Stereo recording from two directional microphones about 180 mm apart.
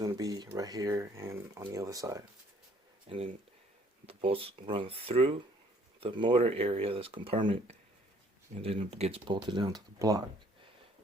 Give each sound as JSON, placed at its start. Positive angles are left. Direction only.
{"t": 0.0, "sound": "speech", "side_deg": -20}
{"t": 3.1, "sound": "speech", "side_deg": -30}